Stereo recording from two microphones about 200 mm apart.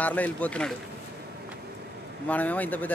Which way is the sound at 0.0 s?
10° left (ahead or behind).